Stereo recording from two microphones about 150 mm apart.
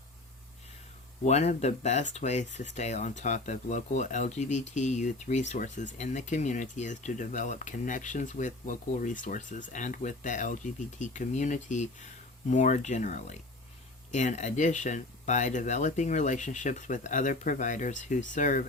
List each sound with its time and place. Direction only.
1.2 s speech: 45° left (ahead or behind)